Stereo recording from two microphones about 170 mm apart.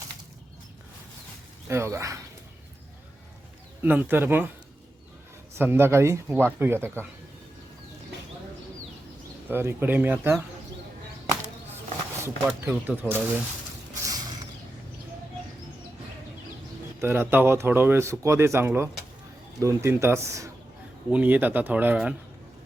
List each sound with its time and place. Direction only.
1.6 s speech: 15° right (ahead or behind)
3.8 s speech: 10° right (ahead or behind)
5.5 s speech: 15° right (ahead or behind)
9.5 s speech: 10° right (ahead or behind)
12.5 s speech: 5° right (ahead or behind)
14.0 s a sound: 20° right (ahead or behind)
17.0 s speech: 15° right (ahead or behind)